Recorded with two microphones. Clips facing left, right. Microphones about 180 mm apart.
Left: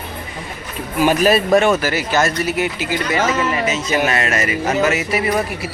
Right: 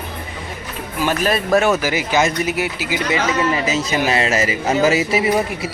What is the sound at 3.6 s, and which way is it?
Speech, 30° right (ahead or behind).